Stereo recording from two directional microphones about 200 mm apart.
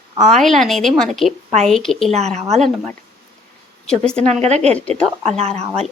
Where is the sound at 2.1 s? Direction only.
35° right (ahead or behind).